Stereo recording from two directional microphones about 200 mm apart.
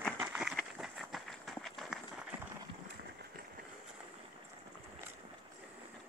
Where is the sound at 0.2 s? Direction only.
5° right (ahead or behind).